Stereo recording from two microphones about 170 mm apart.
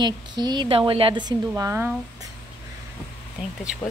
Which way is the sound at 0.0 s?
25° right (ahead or behind).